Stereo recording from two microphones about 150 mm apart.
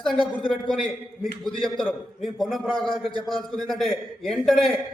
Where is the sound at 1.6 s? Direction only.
Centre (ahead or behind).